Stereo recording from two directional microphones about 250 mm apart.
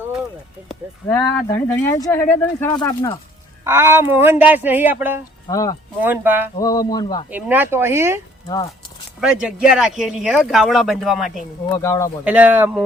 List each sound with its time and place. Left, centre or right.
1.0 s speech: centre
3.6 s speech: centre
5.5 s speech: centre
6.0 s speech: centre
6.6 s speech: centre
7.3 s speech: centre
9.2 s speech: centre
11.6 s speech: centre
12.2 s speech: centre